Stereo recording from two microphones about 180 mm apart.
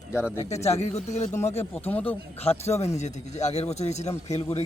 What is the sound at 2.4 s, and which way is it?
Speech, 35° left (ahead or behind).